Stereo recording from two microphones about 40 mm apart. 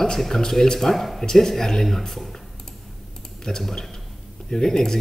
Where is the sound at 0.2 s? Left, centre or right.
Centre.